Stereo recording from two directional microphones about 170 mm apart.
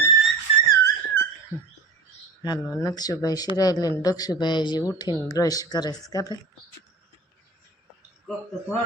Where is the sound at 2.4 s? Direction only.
20° left (ahead or behind).